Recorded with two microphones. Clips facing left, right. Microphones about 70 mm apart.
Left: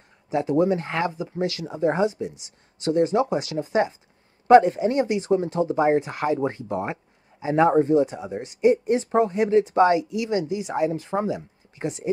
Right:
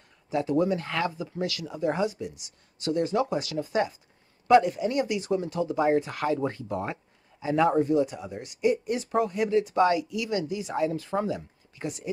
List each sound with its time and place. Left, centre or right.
0.3 s speech: left